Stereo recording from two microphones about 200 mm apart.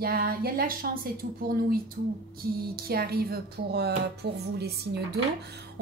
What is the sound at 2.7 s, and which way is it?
Speech, 50° right (ahead or behind).